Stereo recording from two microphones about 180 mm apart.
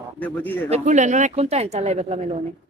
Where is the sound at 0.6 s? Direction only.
40° right (ahead or behind).